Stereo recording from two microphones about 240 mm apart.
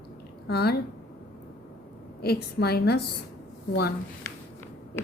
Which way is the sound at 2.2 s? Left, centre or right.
Left.